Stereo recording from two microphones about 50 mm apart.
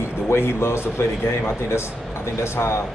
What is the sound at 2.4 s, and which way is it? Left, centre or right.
Speech, left.